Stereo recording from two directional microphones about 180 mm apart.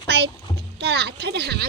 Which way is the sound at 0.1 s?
65° right (ahead or behind).